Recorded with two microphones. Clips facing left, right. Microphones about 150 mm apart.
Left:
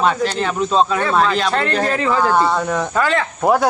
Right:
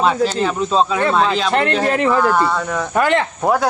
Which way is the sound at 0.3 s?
5° right (ahead or behind).